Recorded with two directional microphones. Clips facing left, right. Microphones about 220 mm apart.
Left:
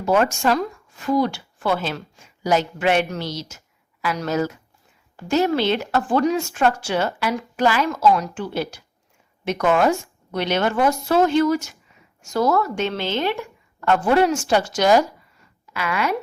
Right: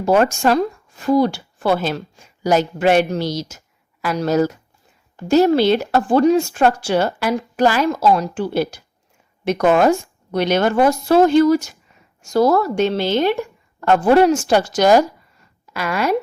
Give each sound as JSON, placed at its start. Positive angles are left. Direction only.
{"t": 0.0, "sound": "speech", "side_deg": -35}